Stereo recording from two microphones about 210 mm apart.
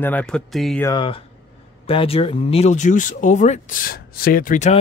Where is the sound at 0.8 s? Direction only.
20° left (ahead or behind).